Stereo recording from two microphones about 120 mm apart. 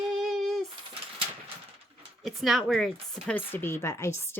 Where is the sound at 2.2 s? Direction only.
Centre (ahead or behind).